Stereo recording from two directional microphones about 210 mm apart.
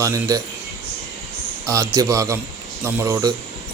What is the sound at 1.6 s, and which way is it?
A man's voice, 15° right (ahead or behind).